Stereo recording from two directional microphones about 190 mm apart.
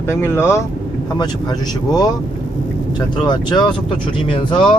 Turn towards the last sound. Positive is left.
turn(degrees=25)  # may be behind; listen again after turning